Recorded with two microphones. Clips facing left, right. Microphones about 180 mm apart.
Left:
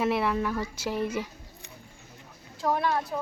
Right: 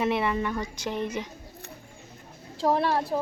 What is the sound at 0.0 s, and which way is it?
A woman's voice, centre (ahead or behind).